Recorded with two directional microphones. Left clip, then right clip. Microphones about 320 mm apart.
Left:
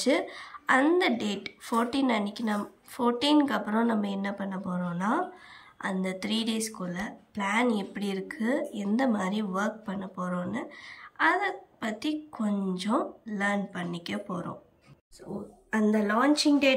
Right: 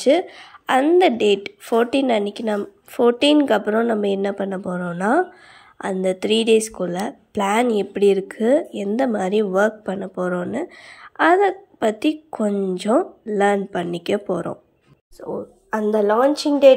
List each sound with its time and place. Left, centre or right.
0.0 s speech: centre
15.2 s a woman's voice: right
16.1 s speech: centre